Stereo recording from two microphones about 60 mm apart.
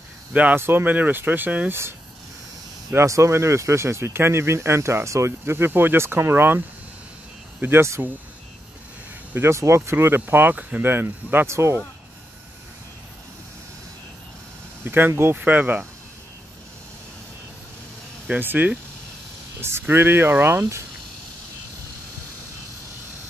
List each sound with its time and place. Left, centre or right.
0.3 s speech: right
0.6 s speech: right
1.7 s speech: right
3.1 s speech: right
5.4 s speech: right
8.0 s speech: right
9.4 s speech: right
11.4 s speech: right
14.9 s speech: right
18.4 s speech: right